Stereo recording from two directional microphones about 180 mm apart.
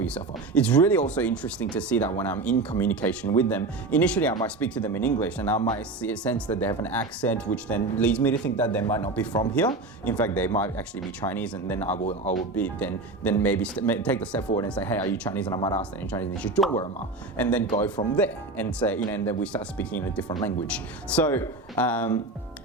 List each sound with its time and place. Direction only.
0.0 s speech: 5° left (ahead or behind)
15.4 s speech: 25° left (ahead or behind)
15.8 s speech: 10° left (ahead or behind)